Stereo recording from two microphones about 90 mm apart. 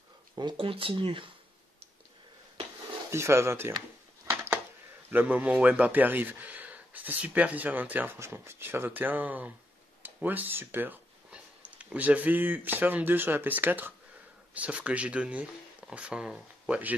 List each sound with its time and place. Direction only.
0.6 s speech: 80° right
3.1 s speech: 30° right (ahead or behind)
5.1 s speech: 15° right (ahead or behind)